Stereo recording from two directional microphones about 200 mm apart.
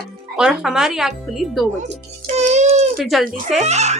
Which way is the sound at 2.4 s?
35° right (ahead or behind).